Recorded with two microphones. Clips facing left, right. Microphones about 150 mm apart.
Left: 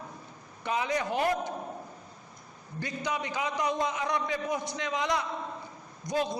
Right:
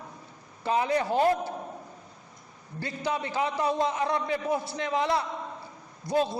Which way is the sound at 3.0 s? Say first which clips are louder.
Right 4 dB; 30° right (ahead or behind).